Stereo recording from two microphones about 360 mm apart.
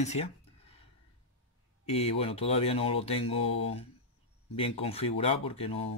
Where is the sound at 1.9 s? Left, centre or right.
Centre.